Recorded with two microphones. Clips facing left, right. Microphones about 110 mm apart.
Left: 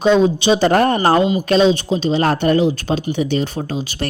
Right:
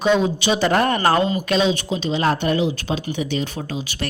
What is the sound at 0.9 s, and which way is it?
Speech, 25° left (ahead or behind).